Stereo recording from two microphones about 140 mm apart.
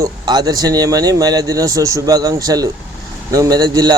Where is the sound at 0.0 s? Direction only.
30° right (ahead or behind).